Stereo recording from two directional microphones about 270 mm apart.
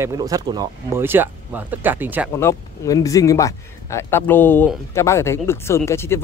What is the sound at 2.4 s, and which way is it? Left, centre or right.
Speech, centre.